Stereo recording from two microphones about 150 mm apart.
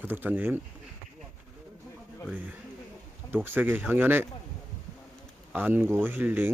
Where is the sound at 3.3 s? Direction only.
15° right (ahead or behind).